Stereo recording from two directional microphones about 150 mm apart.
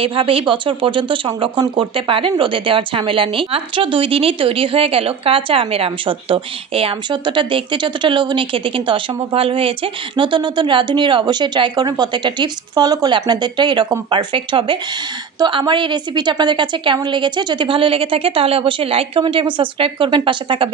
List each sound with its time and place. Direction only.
0.0 s speech: 35° right (ahead or behind)